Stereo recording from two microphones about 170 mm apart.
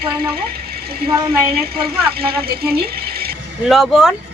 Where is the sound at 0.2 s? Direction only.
65° right (ahead or behind).